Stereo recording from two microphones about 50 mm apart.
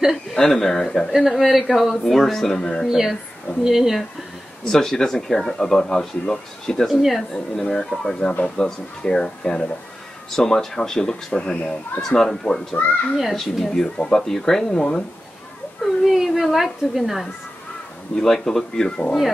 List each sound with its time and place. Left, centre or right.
0.0 s speech: centre
1.1 s speech: centre
2.9 s speech: centre
4.6 s speech: centre
6.9 s speech: centre
7.3 s speech: centre
13.7 s speech: centre
15.8 s speech: centre
18.1 s speech: centre